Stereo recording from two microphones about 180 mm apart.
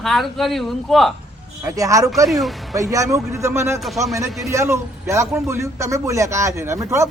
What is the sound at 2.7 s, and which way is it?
A man's voice, 20° right (ahead or behind).